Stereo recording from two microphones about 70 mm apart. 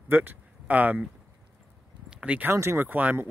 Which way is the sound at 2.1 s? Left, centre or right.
Centre.